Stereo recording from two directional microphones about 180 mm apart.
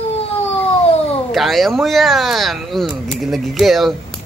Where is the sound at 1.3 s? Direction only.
Centre (ahead or behind).